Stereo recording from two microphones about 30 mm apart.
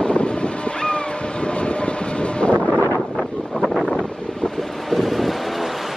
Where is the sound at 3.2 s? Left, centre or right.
Centre.